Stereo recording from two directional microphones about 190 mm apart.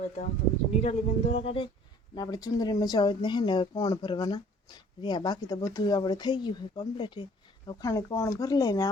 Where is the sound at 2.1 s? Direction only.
20° left (ahead or behind).